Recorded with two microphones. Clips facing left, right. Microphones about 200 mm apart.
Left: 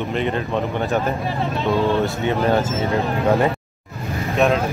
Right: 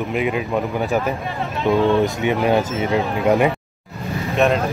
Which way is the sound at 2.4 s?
15° right (ahead or behind).